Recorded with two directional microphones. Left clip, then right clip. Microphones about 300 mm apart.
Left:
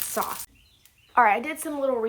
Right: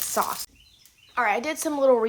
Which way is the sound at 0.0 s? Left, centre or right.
Centre.